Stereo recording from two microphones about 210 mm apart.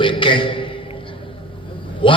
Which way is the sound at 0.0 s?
25° left (ahead or behind).